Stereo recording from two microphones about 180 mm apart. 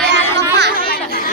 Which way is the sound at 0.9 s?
55° left (ahead or behind).